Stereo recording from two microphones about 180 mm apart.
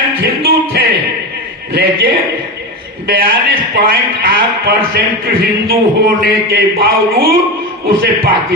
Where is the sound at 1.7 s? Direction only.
60° right (ahead or behind).